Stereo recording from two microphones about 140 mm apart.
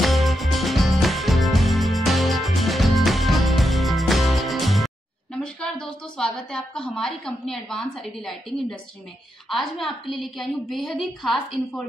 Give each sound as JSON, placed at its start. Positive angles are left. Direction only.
{"t": 0.0, "sound": "music", "side_deg": 0}
{"t": 5.4, "sound": "a woman's voice", "side_deg": 5}